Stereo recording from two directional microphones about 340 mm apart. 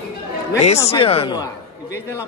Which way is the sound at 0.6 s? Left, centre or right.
Centre.